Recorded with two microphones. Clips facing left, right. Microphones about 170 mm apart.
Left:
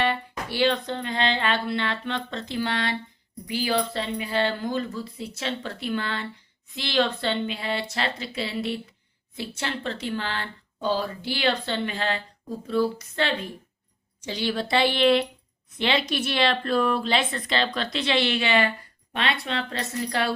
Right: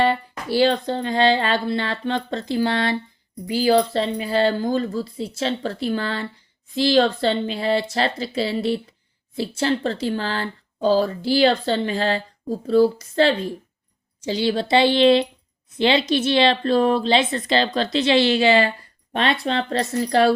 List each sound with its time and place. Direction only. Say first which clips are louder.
0.0 s speech: right 5 dB; 35° right (ahead or behind)
14.4 s a woman's voice: right 5 dB; 30° right (ahead or behind)